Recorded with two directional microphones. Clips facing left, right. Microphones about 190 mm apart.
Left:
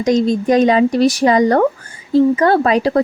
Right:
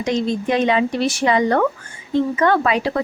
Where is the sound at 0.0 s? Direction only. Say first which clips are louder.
Left 6 dB; 40° left (ahead or behind).